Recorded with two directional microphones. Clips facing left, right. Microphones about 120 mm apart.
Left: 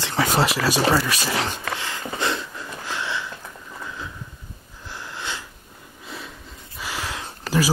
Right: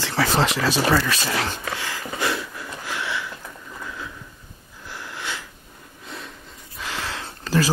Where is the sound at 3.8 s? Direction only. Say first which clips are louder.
Even; 20° left (ahead or behind).